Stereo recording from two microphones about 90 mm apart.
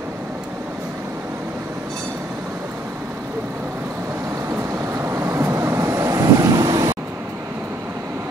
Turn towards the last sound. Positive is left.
turn(degrees=-40)  # may be behind; listen again after turning